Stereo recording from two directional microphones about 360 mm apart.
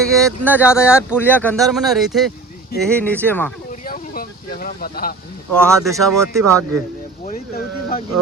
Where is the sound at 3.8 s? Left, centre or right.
Left.